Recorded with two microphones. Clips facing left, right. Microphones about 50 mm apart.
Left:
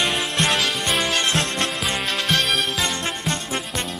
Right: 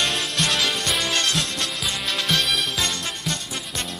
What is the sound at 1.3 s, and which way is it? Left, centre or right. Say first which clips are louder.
Music: left 3 dB; left.